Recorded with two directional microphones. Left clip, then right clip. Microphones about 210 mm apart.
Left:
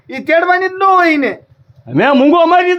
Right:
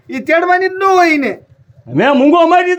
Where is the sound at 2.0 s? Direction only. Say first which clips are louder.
Even; 30° left (ahead or behind).